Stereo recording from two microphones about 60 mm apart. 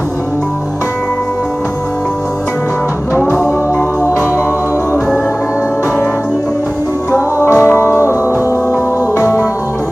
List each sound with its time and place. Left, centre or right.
3.2 s music: left
7.1 s music: left
9.1 s music: left